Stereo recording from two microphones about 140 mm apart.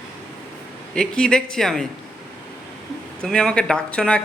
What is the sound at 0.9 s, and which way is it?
Speech, 5° left (ahead or behind).